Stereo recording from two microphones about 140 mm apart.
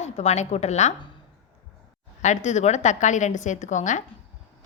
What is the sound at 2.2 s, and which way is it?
A woman's voice, 55° left (ahead or behind).